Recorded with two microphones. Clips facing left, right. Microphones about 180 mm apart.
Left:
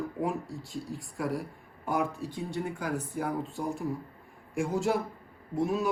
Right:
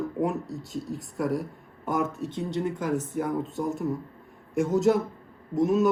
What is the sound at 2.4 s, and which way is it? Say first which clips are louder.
Speech: right 5 dB; 70° right (ahead or behind).